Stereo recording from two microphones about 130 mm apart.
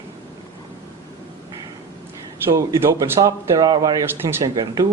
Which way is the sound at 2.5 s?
25° right (ahead or behind).